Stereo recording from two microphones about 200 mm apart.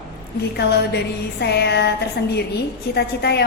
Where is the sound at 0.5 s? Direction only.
55° left (ahead or behind).